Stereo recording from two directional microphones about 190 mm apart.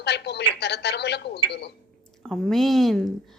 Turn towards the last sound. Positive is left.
turn(degrees=0)  # may be behind; listen again after turning